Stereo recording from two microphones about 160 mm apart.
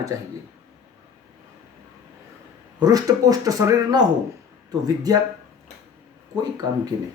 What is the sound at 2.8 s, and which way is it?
Speech, 25° right (ahead or behind).